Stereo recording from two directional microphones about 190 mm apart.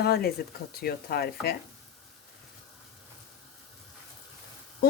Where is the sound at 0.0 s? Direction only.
55° left (ahead or behind).